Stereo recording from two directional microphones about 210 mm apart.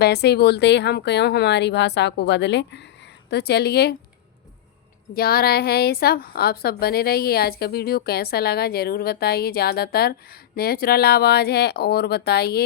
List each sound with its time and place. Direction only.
0.0 s a woman's voice: 50° left (ahead or behind)
5.1 s a woman's voice: 45° left (ahead or behind)